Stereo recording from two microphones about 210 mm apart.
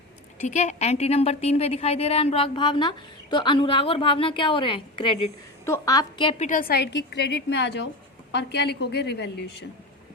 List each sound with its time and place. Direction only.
0.4 s a woman's voice: 35° left (ahead or behind)
6.5 s a woman's voice: 45° left (ahead or behind)